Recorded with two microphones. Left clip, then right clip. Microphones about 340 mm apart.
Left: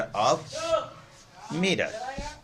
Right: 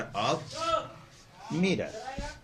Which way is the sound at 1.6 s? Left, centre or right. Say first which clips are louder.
Left 4 dB; left.